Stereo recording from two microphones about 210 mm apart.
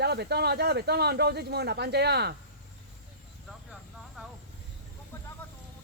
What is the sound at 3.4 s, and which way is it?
Vehicle, centre (ahead or behind).